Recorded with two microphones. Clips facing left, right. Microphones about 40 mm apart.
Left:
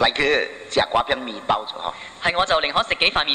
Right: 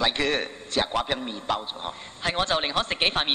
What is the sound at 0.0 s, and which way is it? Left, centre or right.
A man's voice, left.